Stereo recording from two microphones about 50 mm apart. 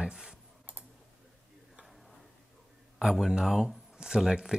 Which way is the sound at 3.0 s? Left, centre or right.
Centre.